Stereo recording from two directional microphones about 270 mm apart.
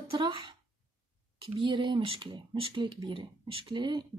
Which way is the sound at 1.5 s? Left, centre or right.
Centre.